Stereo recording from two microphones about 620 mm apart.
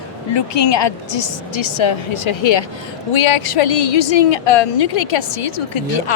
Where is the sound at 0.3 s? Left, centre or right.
Left.